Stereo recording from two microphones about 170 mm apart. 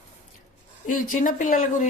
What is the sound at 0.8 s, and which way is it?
Speech, 50° left (ahead or behind).